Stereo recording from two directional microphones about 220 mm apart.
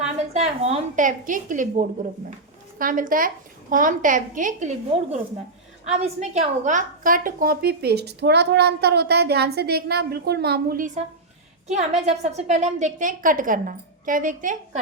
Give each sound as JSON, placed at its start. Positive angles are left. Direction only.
{"t": 0.3, "sound": "a woman's voice", "side_deg": -30}